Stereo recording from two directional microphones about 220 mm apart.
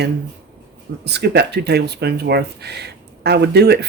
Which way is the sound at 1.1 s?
50° right (ahead or behind).